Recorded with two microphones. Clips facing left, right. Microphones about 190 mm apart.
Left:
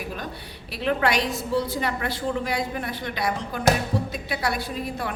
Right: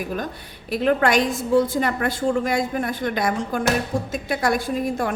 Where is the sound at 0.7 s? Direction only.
45° right (ahead or behind).